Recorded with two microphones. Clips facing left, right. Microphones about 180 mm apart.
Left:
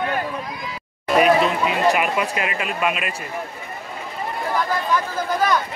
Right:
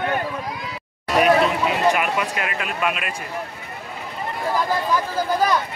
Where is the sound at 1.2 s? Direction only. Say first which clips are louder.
Even; centre (ahead or behind).